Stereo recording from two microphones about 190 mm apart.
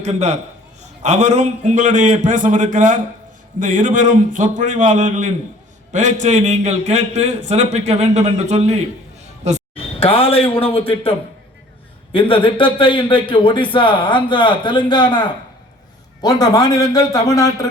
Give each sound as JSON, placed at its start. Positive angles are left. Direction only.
{"t": 0.0, "sound": "a man's voice", "side_deg": -35}
{"t": 9.4, "sound": "a sound", "side_deg": -35}
{"t": 9.7, "sound": "a man's voice", "side_deg": 30}